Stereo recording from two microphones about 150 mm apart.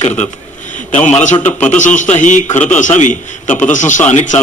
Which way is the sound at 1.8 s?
55° left (ahead or behind).